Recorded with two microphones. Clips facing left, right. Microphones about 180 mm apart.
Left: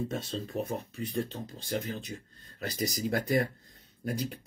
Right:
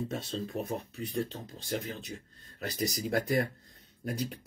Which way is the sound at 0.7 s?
Centre (ahead or behind).